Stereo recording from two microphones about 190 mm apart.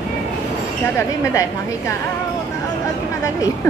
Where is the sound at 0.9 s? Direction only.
15° left (ahead or behind).